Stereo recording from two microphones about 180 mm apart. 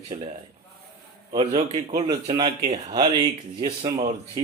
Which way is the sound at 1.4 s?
35° right (ahead or behind).